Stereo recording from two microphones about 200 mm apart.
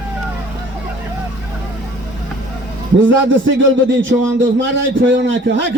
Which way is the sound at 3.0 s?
65° right (ahead or behind).